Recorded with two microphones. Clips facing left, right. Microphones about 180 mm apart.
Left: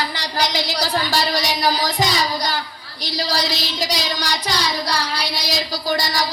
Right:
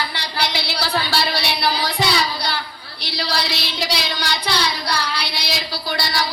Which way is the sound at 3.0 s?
40° left (ahead or behind).